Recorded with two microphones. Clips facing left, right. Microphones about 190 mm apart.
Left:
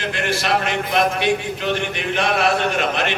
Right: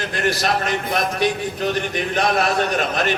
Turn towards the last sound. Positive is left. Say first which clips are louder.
# even
turn(degrees=-40)  # may be behind; listen again after turning